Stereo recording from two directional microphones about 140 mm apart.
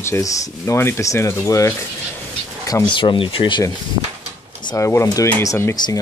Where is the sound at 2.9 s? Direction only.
35° left (ahead or behind).